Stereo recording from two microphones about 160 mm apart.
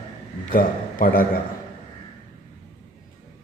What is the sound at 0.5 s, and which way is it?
Speech, 65° left (ahead or behind).